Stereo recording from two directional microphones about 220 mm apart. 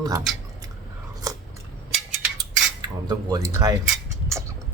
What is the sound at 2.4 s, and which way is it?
Cutlery, 20° right (ahead or behind).